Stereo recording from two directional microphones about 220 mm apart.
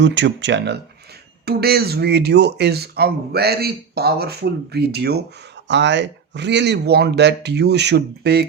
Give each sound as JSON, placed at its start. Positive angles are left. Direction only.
{"t": 0.0, "sound": "speech", "side_deg": -55}